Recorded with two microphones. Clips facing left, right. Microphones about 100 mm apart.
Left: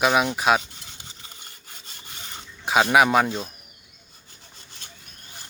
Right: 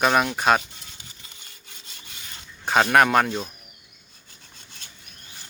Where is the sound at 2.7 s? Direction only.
5° left (ahead or behind).